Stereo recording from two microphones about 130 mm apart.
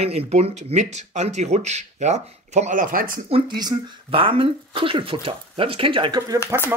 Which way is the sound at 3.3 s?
45° right (ahead or behind).